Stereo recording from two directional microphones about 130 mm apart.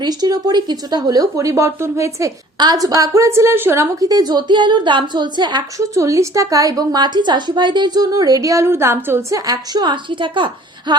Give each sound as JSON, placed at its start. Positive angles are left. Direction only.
{"t": 0.0, "sound": "speech", "side_deg": -30}
{"t": 5.9, "sound": "speech", "side_deg": -25}